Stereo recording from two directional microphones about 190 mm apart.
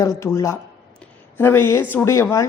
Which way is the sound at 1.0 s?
10° left (ahead or behind).